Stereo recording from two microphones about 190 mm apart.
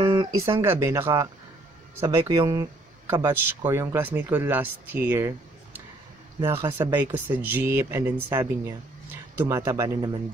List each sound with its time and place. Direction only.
0.0 s a sound: 20° right (ahead or behind)
0.6 s speech: 15° right (ahead or behind)
6.4 s speech: 15° right (ahead or behind)